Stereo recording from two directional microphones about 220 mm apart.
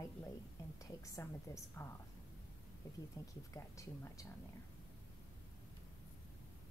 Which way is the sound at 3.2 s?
15° left (ahead or behind).